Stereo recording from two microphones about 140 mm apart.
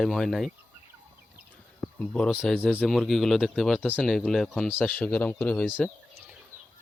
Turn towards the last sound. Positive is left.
turn(degrees=10)  # may be behind; listen again after turning